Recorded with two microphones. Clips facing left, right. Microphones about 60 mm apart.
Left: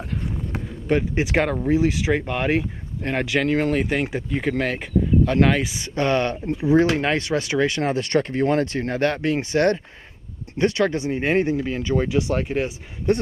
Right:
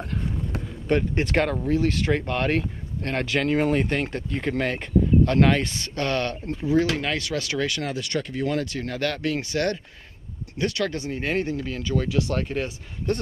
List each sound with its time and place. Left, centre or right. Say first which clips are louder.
0.8 s speech: left 2 dB; centre
5.9 s speech: left 5 dB; centre